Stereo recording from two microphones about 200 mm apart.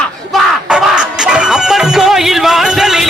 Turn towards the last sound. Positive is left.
turn(degrees=0)  # may be behind; listen again after turning